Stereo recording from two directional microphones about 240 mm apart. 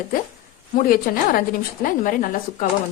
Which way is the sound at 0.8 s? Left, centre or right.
Left.